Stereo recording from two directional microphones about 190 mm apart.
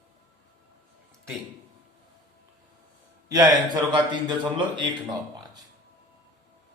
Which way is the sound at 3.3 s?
20° right (ahead or behind).